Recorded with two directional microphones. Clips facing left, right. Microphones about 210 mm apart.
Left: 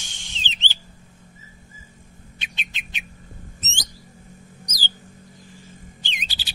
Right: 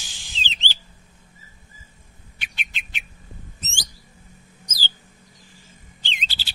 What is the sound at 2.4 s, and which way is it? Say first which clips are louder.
Bird: right 1 dB; 20° left (ahead or behind).